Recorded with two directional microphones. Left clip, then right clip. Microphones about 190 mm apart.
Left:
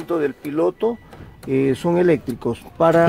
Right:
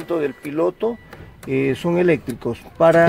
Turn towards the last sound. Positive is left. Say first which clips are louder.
# right 2 dB
turn(degrees=-5)  # may be behind; listen again after turning